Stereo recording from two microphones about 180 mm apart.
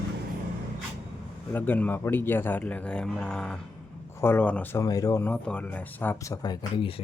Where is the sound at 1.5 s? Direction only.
10° left (ahead or behind).